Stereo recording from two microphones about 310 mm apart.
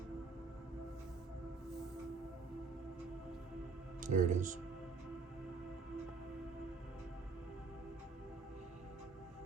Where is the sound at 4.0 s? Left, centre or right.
Right.